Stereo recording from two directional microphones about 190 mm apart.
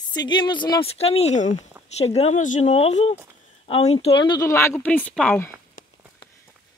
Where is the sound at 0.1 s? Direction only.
20° left (ahead or behind).